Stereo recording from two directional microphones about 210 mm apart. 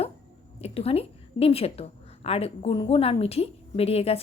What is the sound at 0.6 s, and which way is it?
A woman's voice, 30° left (ahead or behind).